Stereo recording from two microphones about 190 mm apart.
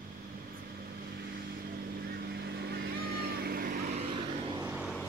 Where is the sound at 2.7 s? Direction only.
55° right (ahead or behind).